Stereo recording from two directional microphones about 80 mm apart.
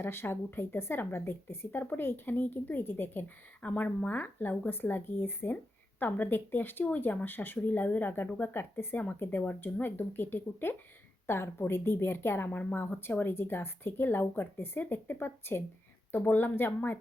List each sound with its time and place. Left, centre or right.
0.0 s speech: left